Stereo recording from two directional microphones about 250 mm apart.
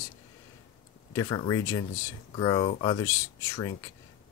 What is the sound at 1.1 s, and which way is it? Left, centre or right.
Speech, centre.